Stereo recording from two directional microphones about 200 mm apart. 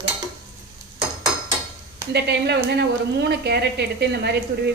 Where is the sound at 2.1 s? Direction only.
55° right (ahead or behind).